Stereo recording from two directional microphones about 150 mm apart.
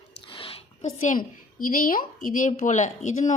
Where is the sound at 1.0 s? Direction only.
60° left (ahead or behind).